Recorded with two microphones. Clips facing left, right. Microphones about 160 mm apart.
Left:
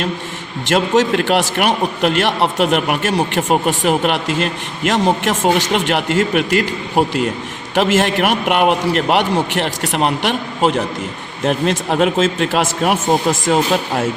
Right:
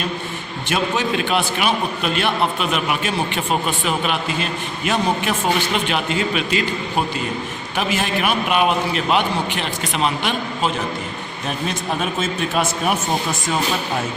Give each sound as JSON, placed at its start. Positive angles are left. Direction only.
{"t": 0.7, "sound": "a man's voice", "side_deg": 80}